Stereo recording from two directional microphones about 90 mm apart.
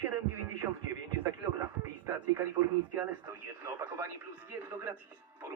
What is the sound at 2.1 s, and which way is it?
Speech, 20° right (ahead or behind).